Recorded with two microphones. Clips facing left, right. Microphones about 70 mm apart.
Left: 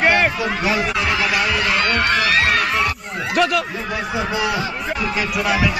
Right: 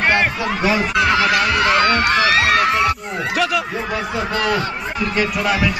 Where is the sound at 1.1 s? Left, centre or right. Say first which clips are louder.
Right 4 dB; right.